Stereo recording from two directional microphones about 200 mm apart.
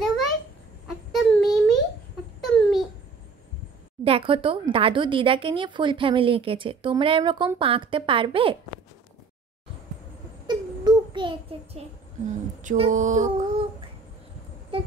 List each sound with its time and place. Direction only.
0.8 s a sound: centre (ahead or behind)
4.0 s speech: 25° right (ahead or behind)
10.4 s child singing: 20° right (ahead or behind)
12.6 s female singing: 35° right (ahead or behind)